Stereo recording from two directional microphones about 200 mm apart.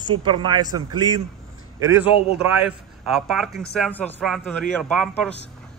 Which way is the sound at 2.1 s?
25° left (ahead or behind).